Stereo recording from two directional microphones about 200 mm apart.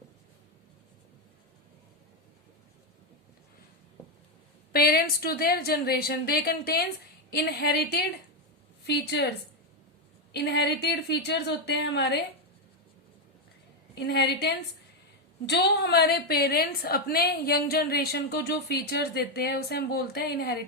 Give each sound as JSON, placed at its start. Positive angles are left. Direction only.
{"t": 4.7, "sound": "a woman's voice", "side_deg": 50}
{"t": 10.3, "sound": "a woman's voice", "side_deg": 55}
{"t": 13.9, "sound": "a woman's voice", "side_deg": 55}